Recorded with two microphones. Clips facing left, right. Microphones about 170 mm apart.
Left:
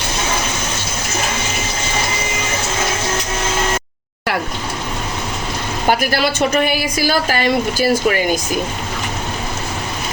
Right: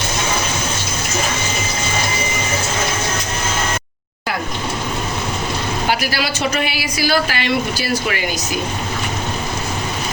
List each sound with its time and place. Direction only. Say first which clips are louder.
5.9 s speech: left 7 dB; 50° left (ahead or behind)